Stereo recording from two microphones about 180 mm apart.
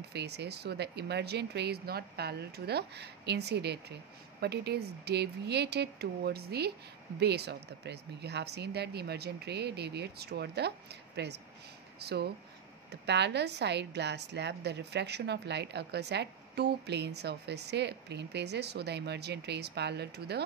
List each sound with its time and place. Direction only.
0.1 s a woman's voice: 70° right (ahead or behind)